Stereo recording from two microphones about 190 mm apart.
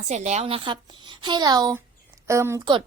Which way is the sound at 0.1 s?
35° right (ahead or behind).